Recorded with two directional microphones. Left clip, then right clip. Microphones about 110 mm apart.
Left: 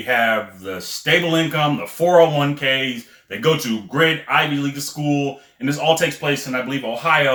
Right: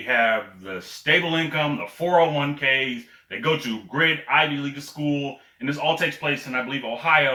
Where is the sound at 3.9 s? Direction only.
30° left (ahead or behind).